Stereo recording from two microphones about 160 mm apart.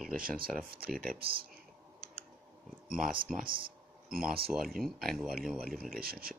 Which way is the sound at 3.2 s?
65° right (ahead or behind).